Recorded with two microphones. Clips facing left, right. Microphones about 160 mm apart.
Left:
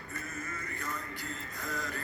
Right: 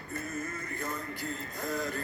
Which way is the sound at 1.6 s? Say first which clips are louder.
Right 5 dB; 35° right (ahead or behind).